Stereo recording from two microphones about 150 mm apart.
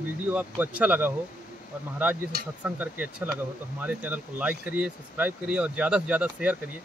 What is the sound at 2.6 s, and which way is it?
Speech, 10° right (ahead or behind).